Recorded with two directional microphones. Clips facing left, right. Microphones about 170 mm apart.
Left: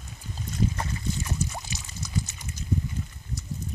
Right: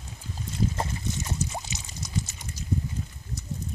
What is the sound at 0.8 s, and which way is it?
Boat, 20° right (ahead or behind).